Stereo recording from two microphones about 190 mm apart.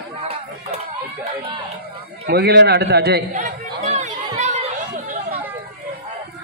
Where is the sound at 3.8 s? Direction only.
35° right (ahead or behind).